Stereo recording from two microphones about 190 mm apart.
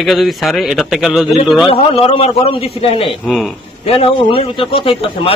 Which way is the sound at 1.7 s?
30° left (ahead or behind).